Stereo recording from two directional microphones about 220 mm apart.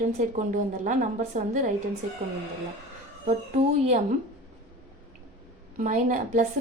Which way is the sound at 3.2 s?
30° right (ahead or behind).